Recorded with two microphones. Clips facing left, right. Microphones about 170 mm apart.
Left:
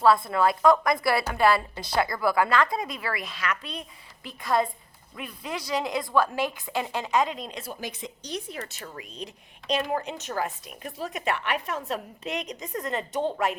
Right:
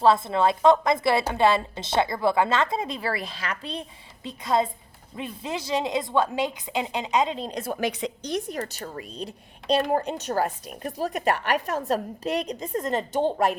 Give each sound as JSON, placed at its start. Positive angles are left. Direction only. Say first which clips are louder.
{"t": 0.0, "sound": "a woman's voice", "louder": "right 1 dB", "side_deg": -25}
{"t": 7.6, "sound": "a woman's voice", "louder": "right 9 dB", "side_deg": -60}
{"t": 8.5, "sound": "a woman's voice", "louder": "right 6 dB", "side_deg": -40}